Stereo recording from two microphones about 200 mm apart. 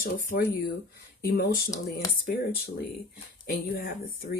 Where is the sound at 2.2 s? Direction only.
50° left (ahead or behind).